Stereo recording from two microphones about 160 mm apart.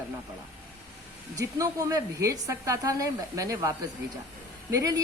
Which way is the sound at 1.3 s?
20° right (ahead or behind).